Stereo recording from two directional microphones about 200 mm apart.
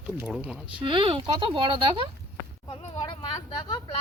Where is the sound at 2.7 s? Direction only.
25° left (ahead or behind).